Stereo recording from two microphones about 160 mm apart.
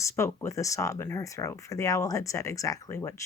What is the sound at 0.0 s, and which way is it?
Speech, 15° left (ahead or behind).